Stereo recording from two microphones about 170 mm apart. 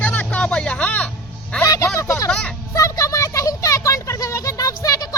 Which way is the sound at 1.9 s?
20° left (ahead or behind).